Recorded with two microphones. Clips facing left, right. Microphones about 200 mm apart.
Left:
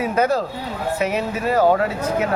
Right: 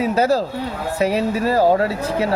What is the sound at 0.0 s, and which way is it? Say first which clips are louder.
Speech: right 2 dB; 30° right (ahead or behind).